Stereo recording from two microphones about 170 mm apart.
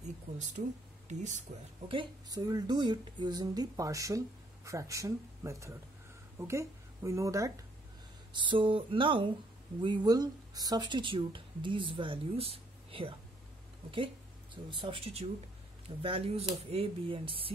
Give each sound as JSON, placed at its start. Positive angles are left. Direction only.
{"t": 1.0, "sound": "speech", "side_deg": -45}
{"t": 1.9, "sound": "speech", "side_deg": -25}